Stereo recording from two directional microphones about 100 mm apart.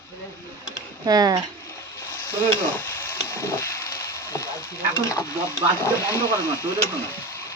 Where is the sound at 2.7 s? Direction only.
25° left (ahead or behind).